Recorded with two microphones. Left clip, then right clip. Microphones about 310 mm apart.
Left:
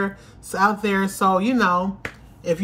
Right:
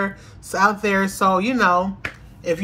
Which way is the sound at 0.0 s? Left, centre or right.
Centre.